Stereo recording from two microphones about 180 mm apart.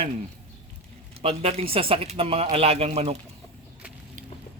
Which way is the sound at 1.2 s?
35° right (ahead or behind).